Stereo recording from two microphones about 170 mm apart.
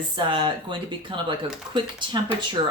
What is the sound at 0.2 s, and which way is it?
Speech, 30° right (ahead or behind).